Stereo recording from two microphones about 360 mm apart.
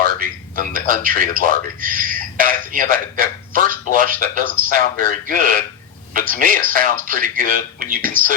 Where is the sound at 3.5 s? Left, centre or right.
Right.